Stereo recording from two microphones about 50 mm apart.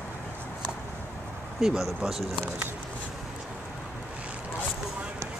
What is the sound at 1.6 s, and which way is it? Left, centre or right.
Speech, centre.